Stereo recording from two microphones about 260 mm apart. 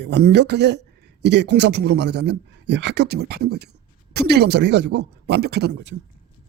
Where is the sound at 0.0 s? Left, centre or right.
Right.